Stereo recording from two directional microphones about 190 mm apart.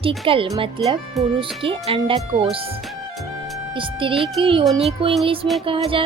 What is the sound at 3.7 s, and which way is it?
Music, 25° right (ahead or behind).